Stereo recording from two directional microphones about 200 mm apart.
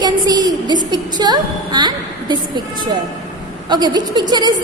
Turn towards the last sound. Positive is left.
turn(degrees=-20)  # may be behind; listen again after turning